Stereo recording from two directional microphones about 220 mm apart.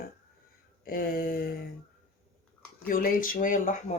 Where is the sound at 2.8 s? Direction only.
40° left (ahead or behind).